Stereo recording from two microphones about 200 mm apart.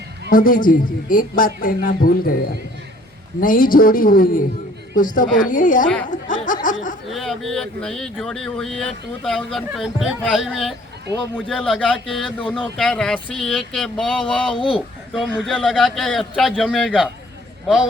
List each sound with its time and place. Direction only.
0.3 s a man's voice: 45° left (ahead or behind)
7.1 s speech: centre (ahead or behind)
14.5 s speech: 25° left (ahead or behind)
15.1 s speech: 5° right (ahead or behind)